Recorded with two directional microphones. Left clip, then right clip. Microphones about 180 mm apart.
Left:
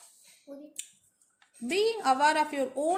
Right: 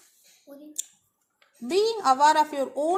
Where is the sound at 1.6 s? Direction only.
20° right (ahead or behind).